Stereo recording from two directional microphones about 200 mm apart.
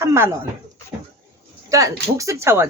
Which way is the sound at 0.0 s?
15° right (ahead or behind).